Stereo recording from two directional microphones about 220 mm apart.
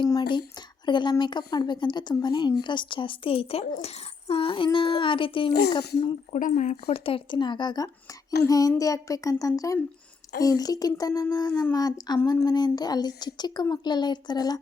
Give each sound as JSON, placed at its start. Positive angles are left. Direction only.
{"t": 0.0, "sound": "a sound", "side_deg": 20}
{"t": 0.9, "sound": "a woman's voice", "side_deg": 20}
{"t": 6.3, "sound": "a woman's voice", "side_deg": 35}